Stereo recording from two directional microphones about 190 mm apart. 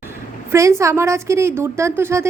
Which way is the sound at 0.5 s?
15° right (ahead or behind).